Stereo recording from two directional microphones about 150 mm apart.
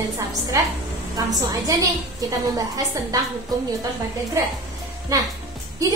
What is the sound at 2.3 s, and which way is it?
Speech, 25° right (ahead or behind).